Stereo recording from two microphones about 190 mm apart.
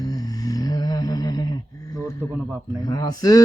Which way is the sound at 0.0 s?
20° left (ahead or behind).